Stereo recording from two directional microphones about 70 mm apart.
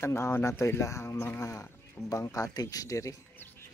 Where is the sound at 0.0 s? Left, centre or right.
Left.